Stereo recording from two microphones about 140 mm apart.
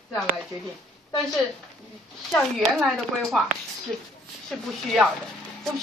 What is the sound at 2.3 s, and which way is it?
A woman's voice, centre (ahead or behind).